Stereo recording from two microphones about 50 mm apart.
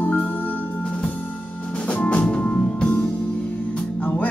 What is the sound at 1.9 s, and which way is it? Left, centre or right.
Music, left.